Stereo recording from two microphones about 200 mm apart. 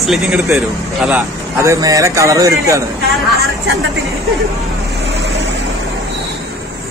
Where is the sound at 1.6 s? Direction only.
15° right (ahead or behind).